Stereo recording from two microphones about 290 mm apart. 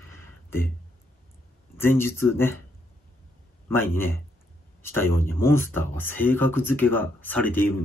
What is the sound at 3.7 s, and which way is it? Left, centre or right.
Speech, centre.